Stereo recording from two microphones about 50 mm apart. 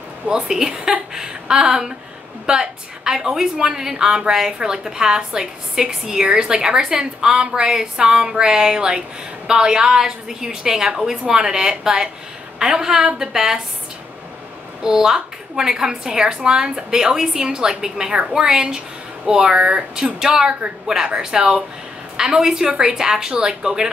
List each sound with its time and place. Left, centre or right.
0.5 s a woman's voice: centre
14.8 s a woman's voice: centre